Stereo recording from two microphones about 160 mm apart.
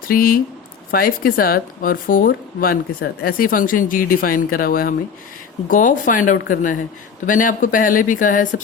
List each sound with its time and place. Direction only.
0.1 s speech: 65° left (ahead or behind)